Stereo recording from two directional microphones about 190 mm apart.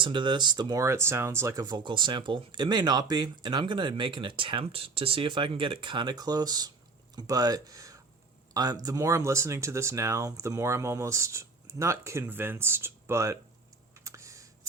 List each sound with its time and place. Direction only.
0.0 s speech: 25° right (ahead or behind)
13.9 s computer keyboard: 15° right (ahead or behind)